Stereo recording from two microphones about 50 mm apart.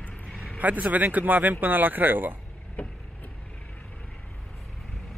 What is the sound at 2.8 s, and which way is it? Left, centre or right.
Vehicle, left.